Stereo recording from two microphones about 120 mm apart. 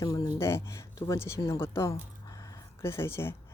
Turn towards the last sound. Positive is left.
turn(degrees=20)  # may be behind; listen again after turning